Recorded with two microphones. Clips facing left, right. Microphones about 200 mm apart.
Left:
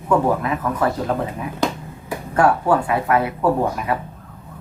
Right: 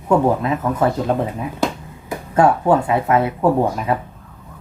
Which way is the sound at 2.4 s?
25° right (ahead or behind).